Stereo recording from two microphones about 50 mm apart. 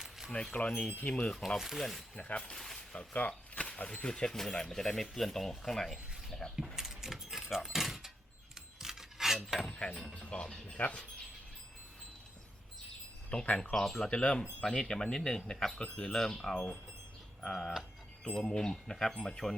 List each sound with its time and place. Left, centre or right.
0.5 s speech: left
1.5 s speech: centre
2.1 s speech: left
2.4 s speech: centre
3.1 s speech: left; by 6.4 s centre
6.7 s keys jangling: centre
8.8 s cutlery: centre
9.9 s speech: centre
10.2 s speech: centre
13.3 s speech: left
13.7 s speech: centre
14.1 s speech: centre